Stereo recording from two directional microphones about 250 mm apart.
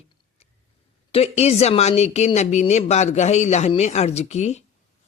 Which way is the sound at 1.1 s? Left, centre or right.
Left.